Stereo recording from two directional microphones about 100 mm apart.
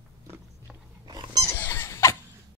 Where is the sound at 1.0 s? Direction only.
45° right (ahead or behind).